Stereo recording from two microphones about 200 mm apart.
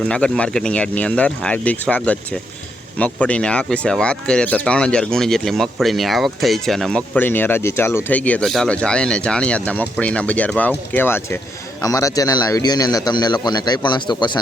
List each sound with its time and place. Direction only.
0.0 s a man's voice: 5° left (ahead or behind); by 14.3 s 20° left (ahead or behind)